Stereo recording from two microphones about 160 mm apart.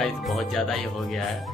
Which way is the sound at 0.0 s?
Centre (ahead or behind).